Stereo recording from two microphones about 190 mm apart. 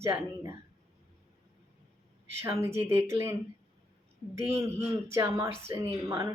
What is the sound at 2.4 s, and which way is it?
Speech, 15° right (ahead or behind).